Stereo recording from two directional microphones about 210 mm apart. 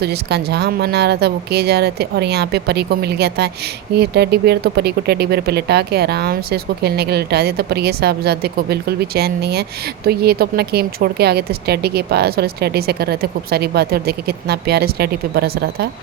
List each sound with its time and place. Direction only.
0.0 s speech: 50° right (ahead or behind)